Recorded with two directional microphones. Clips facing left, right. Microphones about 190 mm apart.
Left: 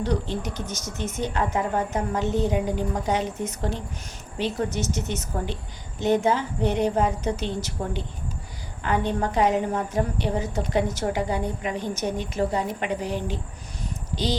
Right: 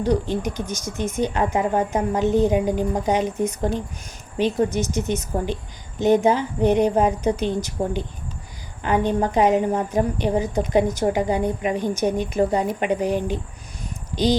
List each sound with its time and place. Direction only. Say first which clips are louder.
0.0 s a woman's voice: right 5 dB; 15° right (ahead or behind)